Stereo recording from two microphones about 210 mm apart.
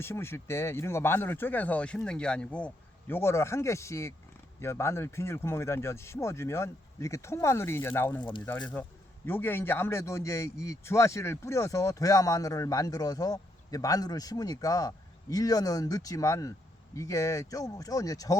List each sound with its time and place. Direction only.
0.0 s a man's voice: 10° left (ahead or behind)